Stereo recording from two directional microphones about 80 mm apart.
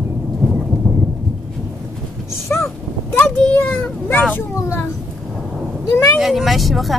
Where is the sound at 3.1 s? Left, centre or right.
Centre.